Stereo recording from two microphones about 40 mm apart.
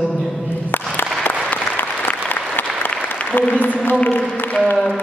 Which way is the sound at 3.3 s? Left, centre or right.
Left.